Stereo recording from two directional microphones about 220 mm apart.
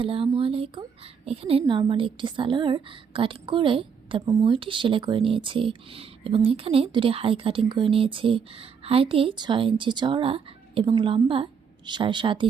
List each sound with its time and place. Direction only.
0.0 s a woman's voice: 25° right (ahead or behind)